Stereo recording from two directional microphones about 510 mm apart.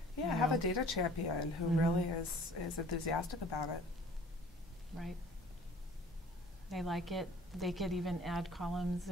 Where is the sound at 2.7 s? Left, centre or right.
Left.